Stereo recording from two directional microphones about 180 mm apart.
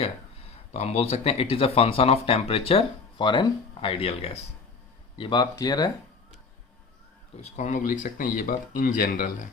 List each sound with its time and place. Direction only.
0.7 s speech: 35° left (ahead or behind); by 5.9 s 20° left (ahead or behind)
7.5 s speech: 45° left (ahead or behind)